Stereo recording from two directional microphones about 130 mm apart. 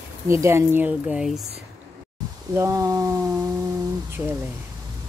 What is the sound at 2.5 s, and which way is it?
Speech, 20° right (ahead or behind).